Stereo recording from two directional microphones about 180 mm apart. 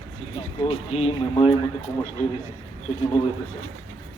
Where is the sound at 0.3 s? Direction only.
35° left (ahead or behind).